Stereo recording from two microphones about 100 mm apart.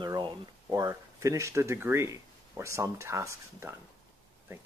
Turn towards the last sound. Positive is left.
turn(degrees=-30)  # may be behind; listen again after turning